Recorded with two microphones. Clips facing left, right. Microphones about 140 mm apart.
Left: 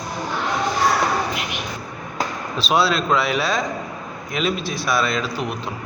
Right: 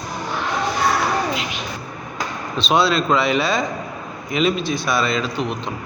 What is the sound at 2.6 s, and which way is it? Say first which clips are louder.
A man's voice: right 2 dB; centre (ahead or behind).